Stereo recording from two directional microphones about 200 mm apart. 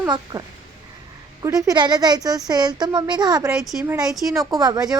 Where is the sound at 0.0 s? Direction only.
20° right (ahead or behind).